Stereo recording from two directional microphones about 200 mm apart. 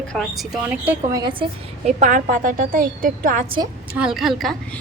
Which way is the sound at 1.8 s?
40° right (ahead or behind).